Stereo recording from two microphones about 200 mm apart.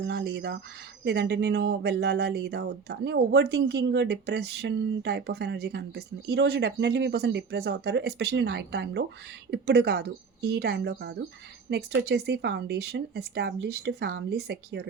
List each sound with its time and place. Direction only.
0.0 s speech: 60° right (ahead or behind)